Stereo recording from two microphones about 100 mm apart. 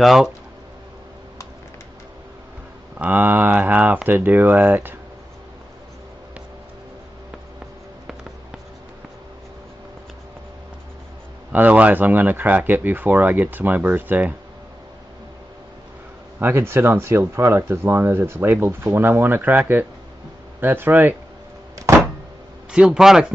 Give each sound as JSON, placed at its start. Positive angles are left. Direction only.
{"t": 0.0, "sound": "speech", "side_deg": -5}
{"t": 3.0, "sound": "speech", "side_deg": -20}
{"t": 11.5, "sound": "speech", "side_deg": -15}
{"t": 16.3, "sound": "speech", "side_deg": -20}
{"t": 21.7, "sound": "door", "side_deg": -30}
{"t": 22.7, "sound": "a man's voice", "side_deg": -5}